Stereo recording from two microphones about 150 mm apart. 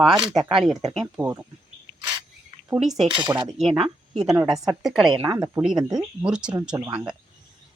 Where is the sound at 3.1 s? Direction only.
30° right (ahead or behind).